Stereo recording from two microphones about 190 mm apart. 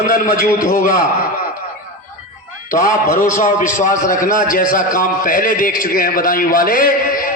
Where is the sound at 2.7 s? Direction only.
45° left (ahead or behind).